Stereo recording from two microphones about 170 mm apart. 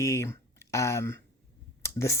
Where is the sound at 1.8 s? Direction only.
15° left (ahead or behind).